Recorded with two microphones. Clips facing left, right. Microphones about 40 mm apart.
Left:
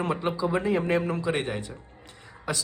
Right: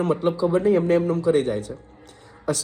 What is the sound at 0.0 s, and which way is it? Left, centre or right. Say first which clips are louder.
A man's voice: right 6 dB; left.